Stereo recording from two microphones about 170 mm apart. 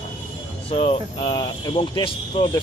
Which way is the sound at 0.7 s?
35° left (ahead or behind).